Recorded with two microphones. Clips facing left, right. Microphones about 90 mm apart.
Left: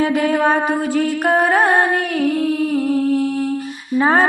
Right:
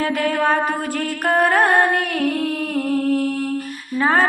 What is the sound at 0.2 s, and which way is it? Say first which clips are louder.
Music: left 3 dB; 15° left (ahead or behind).